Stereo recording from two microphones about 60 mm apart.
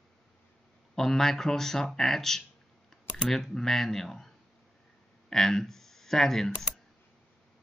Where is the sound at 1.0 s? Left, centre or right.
Centre.